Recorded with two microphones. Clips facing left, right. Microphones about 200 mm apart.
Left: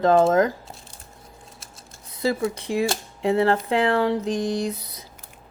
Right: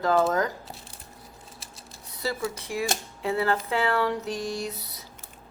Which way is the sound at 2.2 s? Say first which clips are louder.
Left 7 dB; 15° left (ahead or behind).